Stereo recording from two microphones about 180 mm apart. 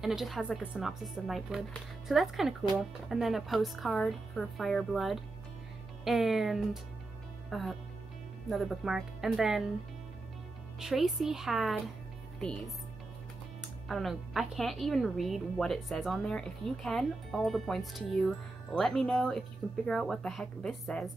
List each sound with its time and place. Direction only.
0.0 s a woman's voice: centre (ahead or behind)
10.8 s a woman's voice: centre (ahead or behind)
13.8 s a woman's voice: centre (ahead or behind)